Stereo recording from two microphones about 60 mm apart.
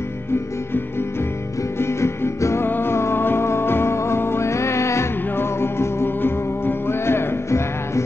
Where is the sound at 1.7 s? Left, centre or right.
Left.